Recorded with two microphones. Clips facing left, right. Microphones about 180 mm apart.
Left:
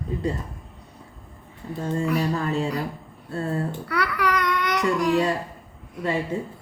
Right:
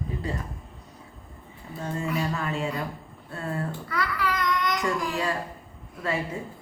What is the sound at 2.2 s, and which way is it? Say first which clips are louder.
Speech: left 4 dB; 35° left (ahead or behind).